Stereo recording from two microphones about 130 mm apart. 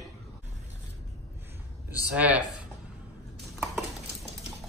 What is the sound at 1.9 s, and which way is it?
Speech, 10° right (ahead or behind).